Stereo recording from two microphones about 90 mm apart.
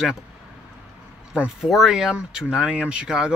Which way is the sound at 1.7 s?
5° right (ahead or behind).